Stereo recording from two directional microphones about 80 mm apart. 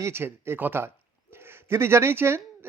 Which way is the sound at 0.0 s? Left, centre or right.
Right.